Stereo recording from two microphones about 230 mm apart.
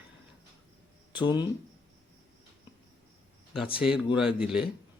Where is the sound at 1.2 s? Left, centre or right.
Centre.